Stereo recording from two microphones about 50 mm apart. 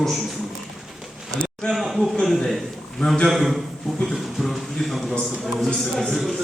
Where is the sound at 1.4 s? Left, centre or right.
Centre.